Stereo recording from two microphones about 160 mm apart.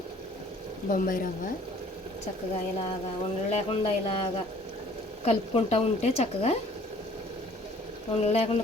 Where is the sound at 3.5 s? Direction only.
40° left (ahead or behind).